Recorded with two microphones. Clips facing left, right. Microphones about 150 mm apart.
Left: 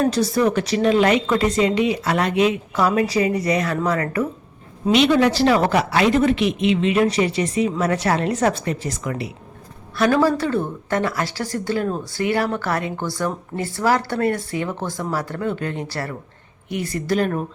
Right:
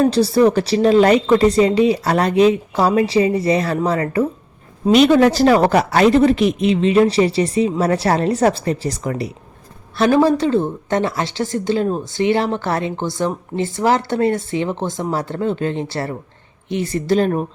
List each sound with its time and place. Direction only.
0.0 s a woman's voice: 30° right (ahead or behind)
4.9 s a woman's voice: 40° right (ahead or behind)
10.0 s a woman's voice: 20° right (ahead or behind)